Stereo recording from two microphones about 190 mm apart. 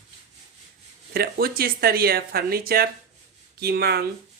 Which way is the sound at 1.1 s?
55° right (ahead or behind).